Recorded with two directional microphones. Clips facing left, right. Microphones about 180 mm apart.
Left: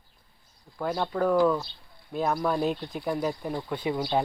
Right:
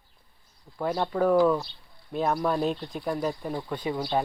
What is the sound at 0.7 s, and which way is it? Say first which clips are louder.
Speech: right 1 dB; 5° right (ahead or behind).